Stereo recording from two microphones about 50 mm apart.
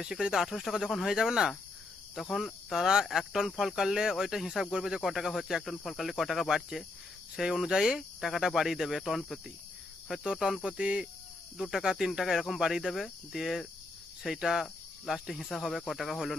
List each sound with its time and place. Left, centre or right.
0.0 s speech: centre
1.0 s speech: centre
2.1 s speech: centre
5.0 s speech: centre
10.3 s speech: centre
10.6 s cricket: centre
11.5 s speech: centre
11.8 s speech: centre